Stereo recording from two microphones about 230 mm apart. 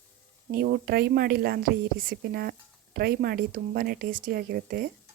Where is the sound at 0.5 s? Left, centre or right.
Right.